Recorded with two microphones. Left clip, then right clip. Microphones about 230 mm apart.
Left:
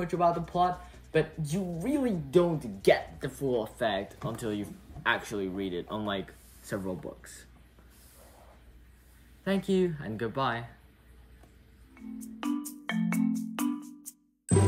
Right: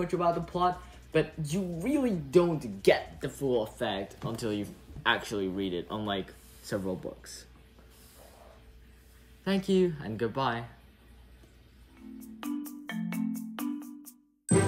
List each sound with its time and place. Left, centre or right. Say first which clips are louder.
0.0 s speech: left 1 dB; centre
9.4 s speech: right 1 dB; centre
12.4 s music: left 3 dB; centre